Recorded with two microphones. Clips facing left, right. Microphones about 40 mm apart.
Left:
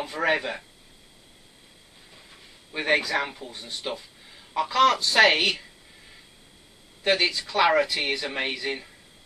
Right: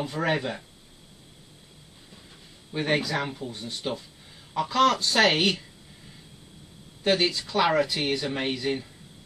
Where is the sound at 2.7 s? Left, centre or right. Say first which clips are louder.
Left 2 dB; centre.